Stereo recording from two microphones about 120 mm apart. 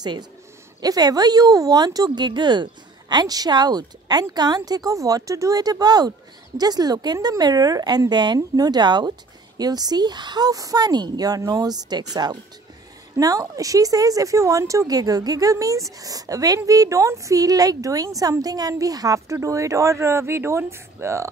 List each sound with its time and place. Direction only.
0.0 s a woman's voice: 40° right (ahead or behind)